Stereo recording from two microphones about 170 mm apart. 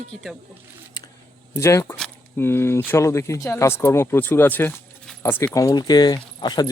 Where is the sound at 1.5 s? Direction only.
15° left (ahead or behind).